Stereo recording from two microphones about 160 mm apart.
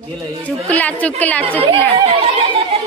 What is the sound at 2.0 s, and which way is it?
Speech, 35° right (ahead or behind).